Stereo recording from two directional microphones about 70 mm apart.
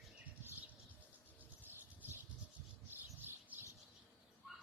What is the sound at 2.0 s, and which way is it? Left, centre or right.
Bird, right.